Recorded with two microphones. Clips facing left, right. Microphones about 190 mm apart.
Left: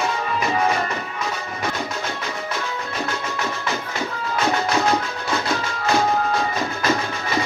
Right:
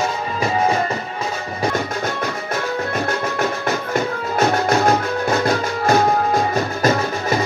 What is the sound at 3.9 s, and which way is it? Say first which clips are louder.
Music: right 8 dB; 50° right (ahead or behind).